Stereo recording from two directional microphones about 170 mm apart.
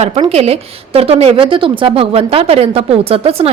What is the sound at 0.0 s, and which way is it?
A woman's voice, 40° right (ahead or behind).